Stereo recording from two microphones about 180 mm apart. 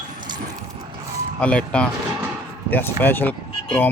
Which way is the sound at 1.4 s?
5° left (ahead or behind).